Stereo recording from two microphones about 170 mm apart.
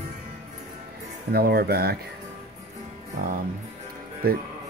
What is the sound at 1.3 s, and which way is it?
Speech, 65° right (ahead or behind).